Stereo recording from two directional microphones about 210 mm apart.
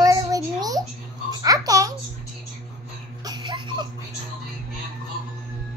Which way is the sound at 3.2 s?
20° right (ahead or behind).